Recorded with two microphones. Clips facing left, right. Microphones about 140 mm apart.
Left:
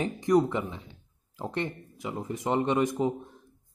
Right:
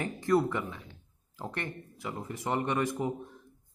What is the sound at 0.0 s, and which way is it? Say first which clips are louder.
Speech: left 3 dB; 20° left (ahead or behind).